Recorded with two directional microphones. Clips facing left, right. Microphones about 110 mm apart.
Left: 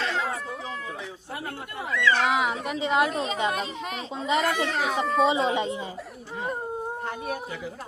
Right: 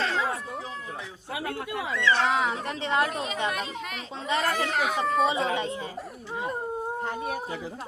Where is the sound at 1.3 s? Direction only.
75° right (ahead or behind).